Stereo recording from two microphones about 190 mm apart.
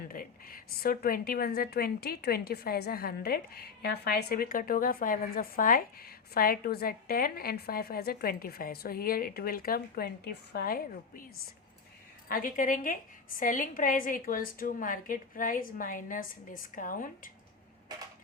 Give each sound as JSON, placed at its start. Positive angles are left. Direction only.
{"t": 0.1, "sound": "a woman's voice", "side_deg": 50}
{"t": 12.3, "sound": "a woman's voice", "side_deg": 45}